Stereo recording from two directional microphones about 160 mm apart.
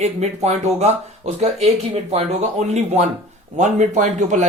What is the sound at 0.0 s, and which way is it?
Speech, 45° right (ahead or behind).